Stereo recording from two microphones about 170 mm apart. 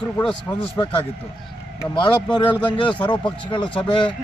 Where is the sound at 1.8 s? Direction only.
25° left (ahead or behind).